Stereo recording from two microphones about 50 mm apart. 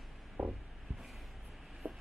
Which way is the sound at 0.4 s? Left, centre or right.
Right.